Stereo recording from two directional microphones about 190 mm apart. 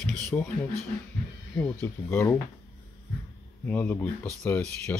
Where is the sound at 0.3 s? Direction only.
10° left (ahead or behind).